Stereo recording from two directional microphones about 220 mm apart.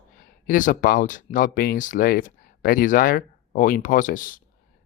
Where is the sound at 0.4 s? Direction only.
35° left (ahead or behind).